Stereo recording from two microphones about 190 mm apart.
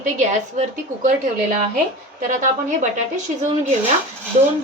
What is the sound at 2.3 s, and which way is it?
Speech, 40° right (ahead or behind).